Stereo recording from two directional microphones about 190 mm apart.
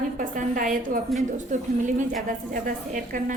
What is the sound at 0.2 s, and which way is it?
Speech, 45° right (ahead or behind).